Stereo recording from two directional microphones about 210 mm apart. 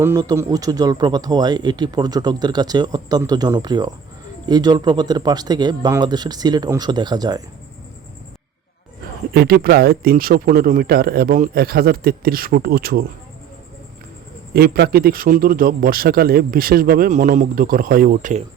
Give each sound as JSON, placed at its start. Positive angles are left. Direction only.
{"t": 0.0, "sound": "speech", "side_deg": -15}
{"t": 9.3, "sound": "a man's voice", "side_deg": -50}
{"t": 14.5, "sound": "a man's voice", "side_deg": -50}